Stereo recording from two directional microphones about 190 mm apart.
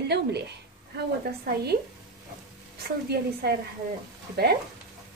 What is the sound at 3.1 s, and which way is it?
Speech, 60° right (ahead or behind).